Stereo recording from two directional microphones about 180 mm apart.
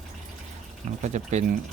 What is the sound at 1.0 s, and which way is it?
Speech, 40° right (ahead or behind).